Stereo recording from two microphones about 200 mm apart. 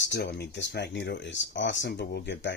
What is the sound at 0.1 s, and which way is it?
Speech, 50° left (ahead or behind).